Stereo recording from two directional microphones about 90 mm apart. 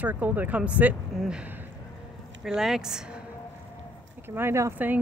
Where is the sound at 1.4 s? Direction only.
20° right (ahead or behind).